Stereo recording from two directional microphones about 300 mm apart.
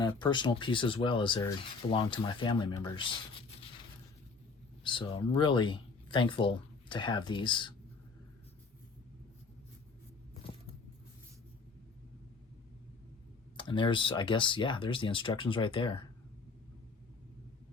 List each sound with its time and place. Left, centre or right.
0.0 s speech: centre
4.8 s speech: centre
13.6 s speech: centre